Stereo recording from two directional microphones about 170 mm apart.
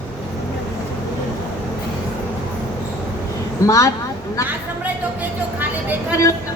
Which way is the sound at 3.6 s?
20° left (ahead or behind).